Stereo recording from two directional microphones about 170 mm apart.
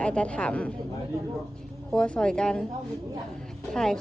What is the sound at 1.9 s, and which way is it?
Speech, 5° left (ahead or behind).